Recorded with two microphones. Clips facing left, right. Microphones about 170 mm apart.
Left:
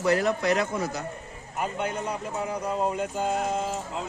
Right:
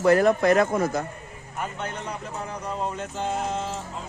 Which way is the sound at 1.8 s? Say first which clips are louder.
Left 3 dB; 10° left (ahead or behind).